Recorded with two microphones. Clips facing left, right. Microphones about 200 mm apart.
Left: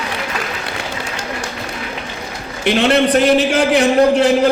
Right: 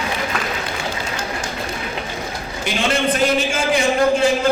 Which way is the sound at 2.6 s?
65° left (ahead or behind).